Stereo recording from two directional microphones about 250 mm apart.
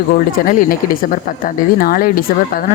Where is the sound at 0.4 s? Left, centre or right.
Left.